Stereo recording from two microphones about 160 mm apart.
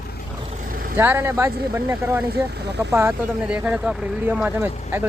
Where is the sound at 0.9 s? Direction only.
15° right (ahead or behind).